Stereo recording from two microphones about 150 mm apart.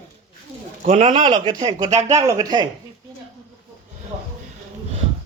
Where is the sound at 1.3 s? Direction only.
30° right (ahead or behind).